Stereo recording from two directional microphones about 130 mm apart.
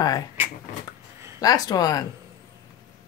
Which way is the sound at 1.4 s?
30° left (ahead or behind).